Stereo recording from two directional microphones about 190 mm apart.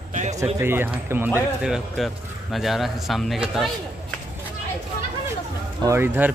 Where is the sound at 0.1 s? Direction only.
40° right (ahead or behind).